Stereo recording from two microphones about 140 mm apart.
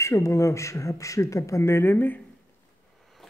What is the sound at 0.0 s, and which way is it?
Speech, 20° left (ahead or behind).